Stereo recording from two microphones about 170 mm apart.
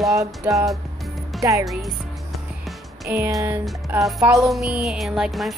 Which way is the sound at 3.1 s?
15° right (ahead or behind).